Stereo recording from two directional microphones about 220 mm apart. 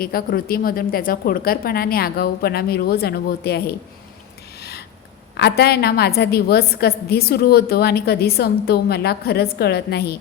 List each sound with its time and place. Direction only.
0.0 s a woman's voice: 40° left (ahead or behind)
5.4 s a woman's voice: 45° left (ahead or behind)